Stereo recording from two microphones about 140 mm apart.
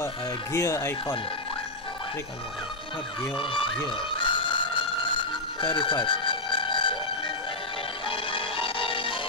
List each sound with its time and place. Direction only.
0.0 s speech: 20° left (ahead or behind)
3.3 s a sound: 40° left (ahead or behind)
8.1 s music: 40° left (ahead or behind)